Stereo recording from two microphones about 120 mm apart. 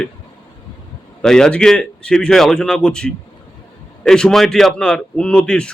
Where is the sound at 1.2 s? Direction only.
5° left (ahead or behind).